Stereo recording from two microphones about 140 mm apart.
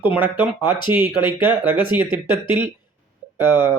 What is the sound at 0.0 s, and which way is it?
Speech, 10° right (ahead or behind).